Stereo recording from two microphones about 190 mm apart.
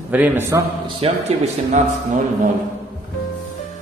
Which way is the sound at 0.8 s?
35° right (ahead or behind).